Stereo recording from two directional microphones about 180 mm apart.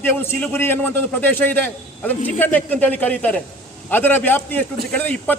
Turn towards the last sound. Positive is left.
turn(degrees=10)  # may be behind; listen again after turning